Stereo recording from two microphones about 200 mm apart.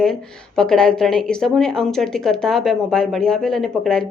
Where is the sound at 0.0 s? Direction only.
5° left (ahead or behind).